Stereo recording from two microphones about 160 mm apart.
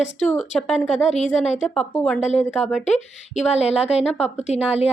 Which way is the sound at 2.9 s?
45° left (ahead or behind).